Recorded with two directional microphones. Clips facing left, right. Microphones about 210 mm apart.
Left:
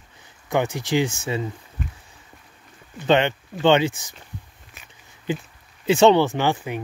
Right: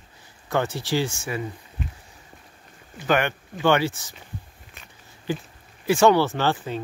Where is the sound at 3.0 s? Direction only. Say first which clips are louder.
Left 4 dB; 25° left (ahead or behind).